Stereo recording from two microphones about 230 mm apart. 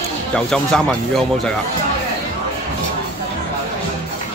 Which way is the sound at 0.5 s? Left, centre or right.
Centre.